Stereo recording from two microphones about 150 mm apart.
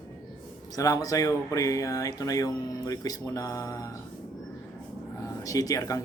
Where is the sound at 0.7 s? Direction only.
25° left (ahead or behind).